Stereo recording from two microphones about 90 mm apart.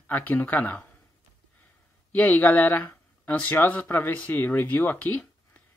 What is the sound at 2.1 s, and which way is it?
Speech, 20° left (ahead or behind).